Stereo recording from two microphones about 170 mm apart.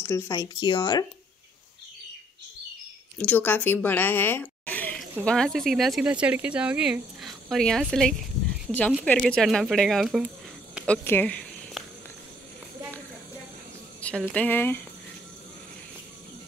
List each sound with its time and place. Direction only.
0.0 s speech: 15° left (ahead or behind)
3.2 s a woman's voice: 10° left (ahead or behind)
10.9 s zipper: 10° left (ahead or behind)
14.0 s speech: 5° left (ahead or behind)